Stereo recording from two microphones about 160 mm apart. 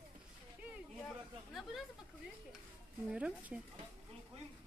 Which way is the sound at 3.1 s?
5° right (ahead or behind).